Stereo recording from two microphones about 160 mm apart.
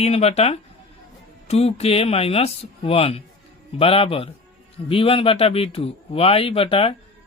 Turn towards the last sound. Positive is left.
turn(degrees=35)  # may be behind; listen again after turning